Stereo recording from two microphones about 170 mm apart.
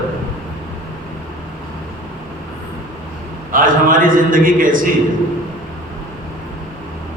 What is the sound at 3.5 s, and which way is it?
A man's voice, 55° right (ahead or behind).